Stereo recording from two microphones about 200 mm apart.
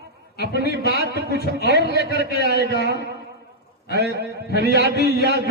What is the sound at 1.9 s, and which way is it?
Speech, 50° left (ahead or behind).